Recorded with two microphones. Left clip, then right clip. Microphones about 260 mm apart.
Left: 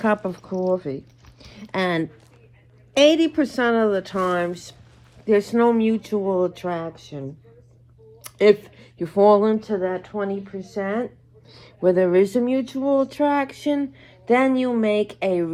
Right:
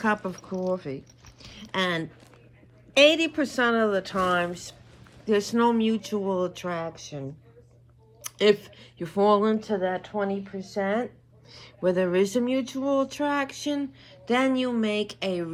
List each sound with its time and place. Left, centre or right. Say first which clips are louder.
0.0 s speech: left 4 dB; centre
0.5 s speech: left 6 dB; centre
1.5 s speech: left 3 dB; centre
6.1 s speech: left 8 dB; centre
8.2 s speech: left 5 dB; centre
9.5 s speech: left 3 dB; centre
11.5 s speech: left 6 dB; centre